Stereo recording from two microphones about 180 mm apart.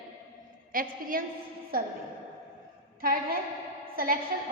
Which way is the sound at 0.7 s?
50° right (ahead or behind).